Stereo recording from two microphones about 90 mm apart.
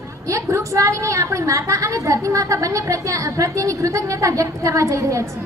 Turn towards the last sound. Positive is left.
turn(degrees=-35)  # may be behind; listen again after turning